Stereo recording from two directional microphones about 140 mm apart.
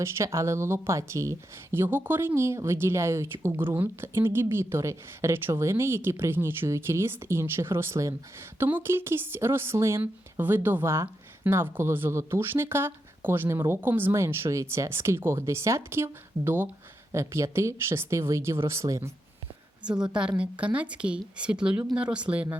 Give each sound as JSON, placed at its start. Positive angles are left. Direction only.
{"t": 0.0, "sound": "speech", "side_deg": -20}
{"t": 19.8, "sound": "speech", "side_deg": -5}